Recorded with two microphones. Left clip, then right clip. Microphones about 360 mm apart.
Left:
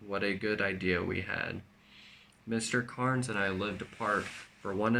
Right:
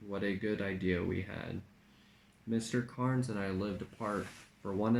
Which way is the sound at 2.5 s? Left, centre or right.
Left.